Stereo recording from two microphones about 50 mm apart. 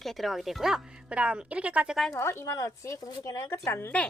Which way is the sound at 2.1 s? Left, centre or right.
Left.